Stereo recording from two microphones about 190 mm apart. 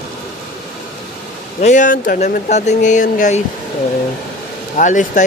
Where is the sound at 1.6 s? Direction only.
40° left (ahead or behind).